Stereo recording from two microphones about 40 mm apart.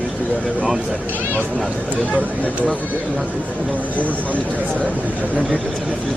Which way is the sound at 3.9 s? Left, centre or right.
Left.